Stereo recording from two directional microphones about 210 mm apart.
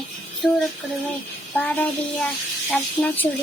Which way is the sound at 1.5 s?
10° left (ahead or behind).